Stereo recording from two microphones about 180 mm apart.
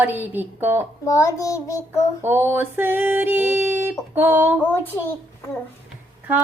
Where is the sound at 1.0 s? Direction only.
15° left (ahead or behind).